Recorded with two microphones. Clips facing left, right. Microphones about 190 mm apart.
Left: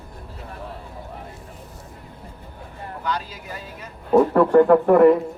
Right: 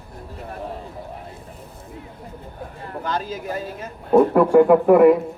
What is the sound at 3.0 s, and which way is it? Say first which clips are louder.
Speech: right 3 dB; 45° right (ahead or behind).